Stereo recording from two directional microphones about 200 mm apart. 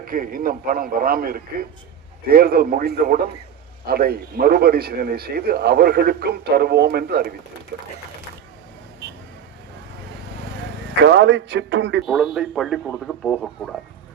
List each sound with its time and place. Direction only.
0.0 s speech: 45° right (ahead or behind)
11.0 s a man's voice: 60° right (ahead or behind)
12.0 s speech: centre (ahead or behind)